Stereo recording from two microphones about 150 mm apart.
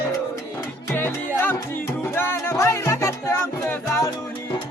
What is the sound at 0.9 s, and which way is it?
Music, 15° left (ahead or behind).